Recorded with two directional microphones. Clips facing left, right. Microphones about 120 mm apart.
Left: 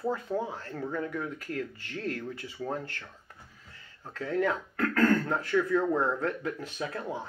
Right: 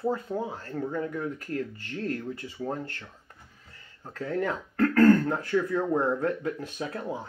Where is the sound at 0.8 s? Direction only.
25° right (ahead or behind).